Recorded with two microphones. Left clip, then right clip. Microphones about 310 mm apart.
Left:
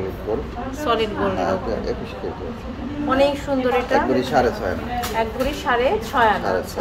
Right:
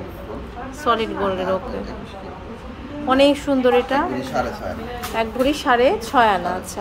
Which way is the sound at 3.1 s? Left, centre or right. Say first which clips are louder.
Right 3 dB; right.